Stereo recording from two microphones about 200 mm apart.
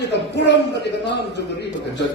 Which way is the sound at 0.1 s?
60° left (ahead or behind).